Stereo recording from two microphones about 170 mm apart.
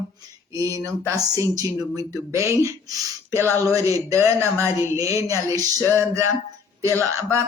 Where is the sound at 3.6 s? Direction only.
20° right (ahead or behind).